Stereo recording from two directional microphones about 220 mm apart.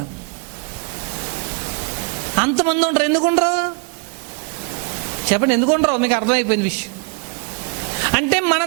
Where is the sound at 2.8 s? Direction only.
15° right (ahead or behind).